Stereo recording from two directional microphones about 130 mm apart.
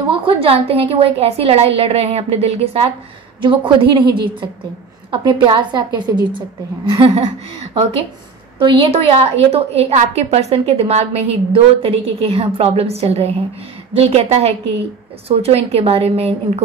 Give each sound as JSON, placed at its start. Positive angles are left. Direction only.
{"t": 0.2, "sound": "a woman's voice", "side_deg": -45}
{"t": 3.4, "sound": "a woman's voice", "side_deg": -40}
{"t": 8.5, "sound": "a woman's voice", "side_deg": -45}